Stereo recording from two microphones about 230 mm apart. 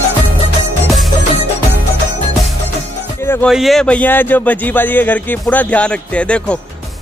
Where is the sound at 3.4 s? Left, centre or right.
Centre.